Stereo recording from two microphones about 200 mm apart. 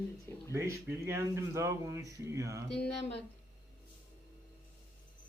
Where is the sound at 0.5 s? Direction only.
15° right (ahead or behind).